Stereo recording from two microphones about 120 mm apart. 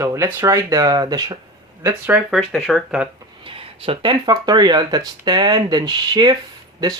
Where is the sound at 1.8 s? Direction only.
15° right (ahead or behind).